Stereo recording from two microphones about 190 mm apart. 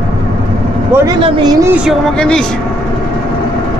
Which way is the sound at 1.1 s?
20° right (ahead or behind).